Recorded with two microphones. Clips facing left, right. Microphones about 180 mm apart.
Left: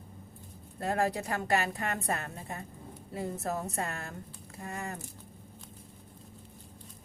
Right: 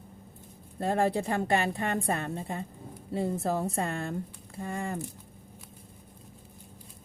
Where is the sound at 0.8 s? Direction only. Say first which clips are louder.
Right 4 dB; 30° right (ahead or behind).